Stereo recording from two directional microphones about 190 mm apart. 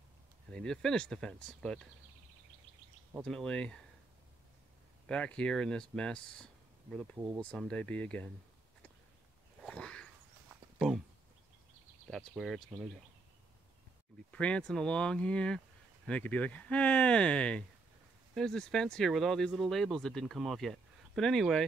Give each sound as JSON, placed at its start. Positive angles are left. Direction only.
{"t": 0.5, "sound": "speech", "side_deg": 5}
{"t": 3.3, "sound": "speech", "side_deg": 5}
{"t": 5.0, "sound": "speech", "side_deg": 5}
{"t": 7.2, "sound": "speech", "side_deg": -15}
{"t": 7.5, "sound": "speech", "side_deg": 5}
{"t": 9.6, "sound": "a sound", "side_deg": 5}
{"t": 12.1, "sound": "speech", "side_deg": 0}
{"t": 14.3, "sound": "speech", "side_deg": 5}